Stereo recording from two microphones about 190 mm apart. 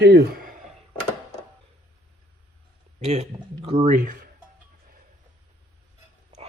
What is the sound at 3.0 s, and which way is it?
A man's voice, 35° right (ahead or behind).